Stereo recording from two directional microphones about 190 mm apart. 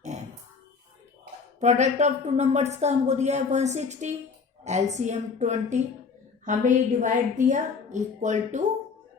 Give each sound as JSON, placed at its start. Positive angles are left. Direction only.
{"t": 1.5, "sound": "speech", "side_deg": -35}